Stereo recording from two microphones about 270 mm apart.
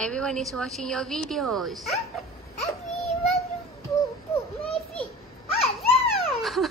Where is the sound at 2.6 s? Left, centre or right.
Left.